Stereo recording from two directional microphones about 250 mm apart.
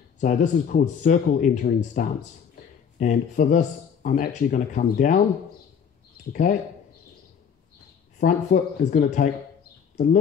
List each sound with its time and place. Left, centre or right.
0.2 s speech: left
6.5 s speech: left
8.2 s speech: left